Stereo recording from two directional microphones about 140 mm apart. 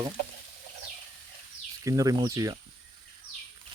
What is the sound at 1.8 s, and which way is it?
Speech, 25° right (ahead or behind).